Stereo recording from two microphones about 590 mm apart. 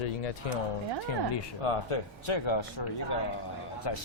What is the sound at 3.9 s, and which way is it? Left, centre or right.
Speech, left.